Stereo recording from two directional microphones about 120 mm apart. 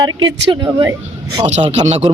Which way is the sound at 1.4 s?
65° right (ahead or behind).